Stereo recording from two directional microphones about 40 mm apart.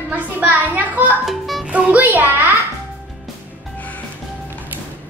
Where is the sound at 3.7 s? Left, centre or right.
Left.